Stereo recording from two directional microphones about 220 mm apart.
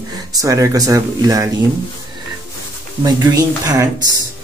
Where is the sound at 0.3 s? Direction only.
15° right (ahead or behind).